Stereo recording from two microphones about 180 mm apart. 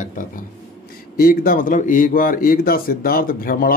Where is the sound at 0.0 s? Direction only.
50° left (ahead or behind).